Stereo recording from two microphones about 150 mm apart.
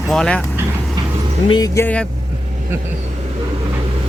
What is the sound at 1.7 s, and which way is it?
Speech, 10° left (ahead or behind).